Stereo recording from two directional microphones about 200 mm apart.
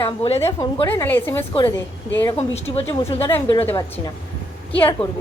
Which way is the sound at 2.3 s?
30° left (ahead or behind).